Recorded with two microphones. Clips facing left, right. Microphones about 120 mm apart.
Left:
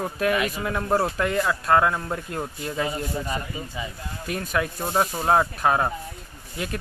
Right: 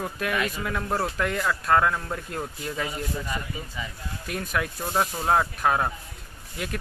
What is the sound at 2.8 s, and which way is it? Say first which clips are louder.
A man's voice: left 3 dB; 25° left (ahead or behind).